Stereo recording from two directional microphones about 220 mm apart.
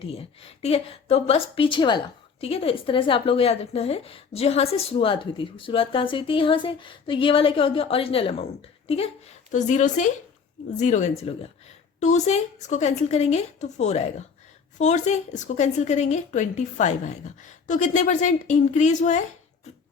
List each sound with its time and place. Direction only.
0.0 s a woman's voice: 25° left (ahead or behind)